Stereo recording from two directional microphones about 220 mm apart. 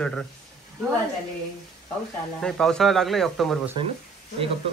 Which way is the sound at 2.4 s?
5° left (ahead or behind).